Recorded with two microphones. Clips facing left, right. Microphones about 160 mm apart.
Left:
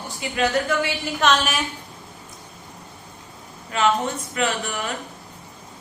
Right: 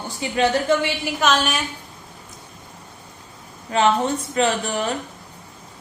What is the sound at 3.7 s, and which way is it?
Speech, 30° right (ahead or behind).